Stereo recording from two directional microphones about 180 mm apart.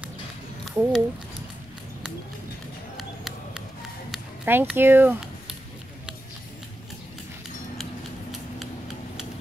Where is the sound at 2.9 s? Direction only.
Centre (ahead or behind).